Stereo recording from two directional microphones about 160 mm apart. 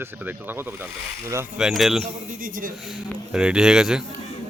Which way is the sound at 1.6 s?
Centre (ahead or behind).